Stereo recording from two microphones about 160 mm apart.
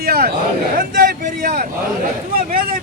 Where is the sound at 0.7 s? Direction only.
60° right (ahead or behind).